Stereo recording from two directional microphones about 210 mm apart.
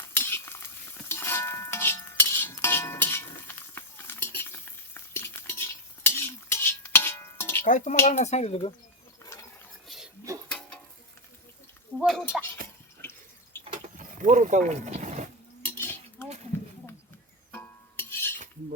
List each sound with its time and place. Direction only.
0.1 s stir: 10° left (ahead or behind)
5.1 s cutlery: 10° left (ahead or behind)
7.6 s speech: 35° left (ahead or behind)
9.2 s ratchet: 15° left (ahead or behind)
9.8 s whispering: centre (ahead or behind)
11.9 s a sound: centre (ahead or behind)
13.0 s water: 10° left (ahead or behind)
13.7 s mechanisms: 35° right (ahead or behind)
15.6 s dishes: 10° left (ahead or behind)
17.5 s cutlery: 10° left (ahead or behind)